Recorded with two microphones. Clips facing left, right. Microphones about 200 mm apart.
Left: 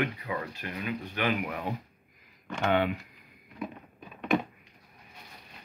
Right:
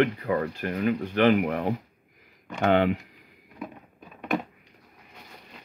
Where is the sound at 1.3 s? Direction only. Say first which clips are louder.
Right 8 dB; 65° right (ahead or behind).